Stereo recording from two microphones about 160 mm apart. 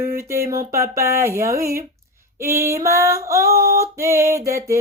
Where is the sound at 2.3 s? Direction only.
15° right (ahead or behind).